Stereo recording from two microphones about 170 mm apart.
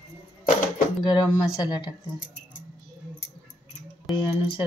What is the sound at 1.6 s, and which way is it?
Speech, 25° left (ahead or behind).